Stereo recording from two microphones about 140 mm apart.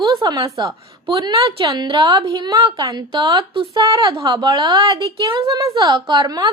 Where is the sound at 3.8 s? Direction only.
25° right (ahead or behind).